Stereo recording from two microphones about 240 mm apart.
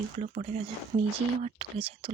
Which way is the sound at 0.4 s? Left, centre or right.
Right.